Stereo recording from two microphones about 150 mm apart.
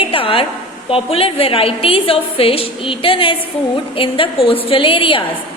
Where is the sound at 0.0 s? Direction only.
35° left (ahead or behind).